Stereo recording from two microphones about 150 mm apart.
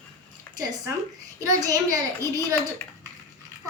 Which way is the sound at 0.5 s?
25° right (ahead or behind).